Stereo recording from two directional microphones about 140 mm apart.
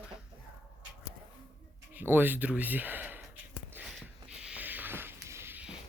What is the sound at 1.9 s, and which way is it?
Speech, 15° right (ahead or behind).